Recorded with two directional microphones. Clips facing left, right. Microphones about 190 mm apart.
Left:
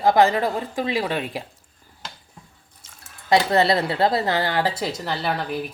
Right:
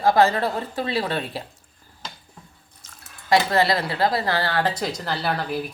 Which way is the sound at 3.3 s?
25° left (ahead or behind).